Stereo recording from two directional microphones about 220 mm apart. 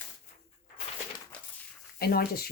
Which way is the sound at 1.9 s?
45° left (ahead or behind).